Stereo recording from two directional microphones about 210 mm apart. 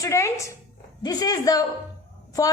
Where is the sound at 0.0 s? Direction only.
15° left (ahead or behind).